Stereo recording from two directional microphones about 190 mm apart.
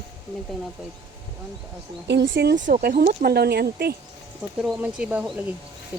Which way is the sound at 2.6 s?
50° right (ahead or behind).